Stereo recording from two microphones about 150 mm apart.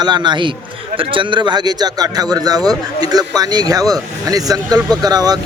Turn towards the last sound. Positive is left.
turn(degrees=-25)  # may be behind; listen again after turning